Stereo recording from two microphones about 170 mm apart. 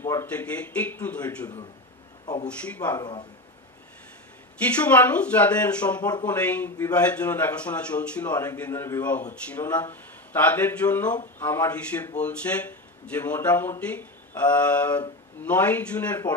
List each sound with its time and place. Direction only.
0.0 s speech: 15° left (ahead or behind)
3.0 s speech: 25° left (ahead or behind)
4.7 s speech: 10° left (ahead or behind)